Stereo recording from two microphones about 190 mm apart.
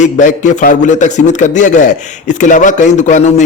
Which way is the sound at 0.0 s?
40° left (ahead or behind).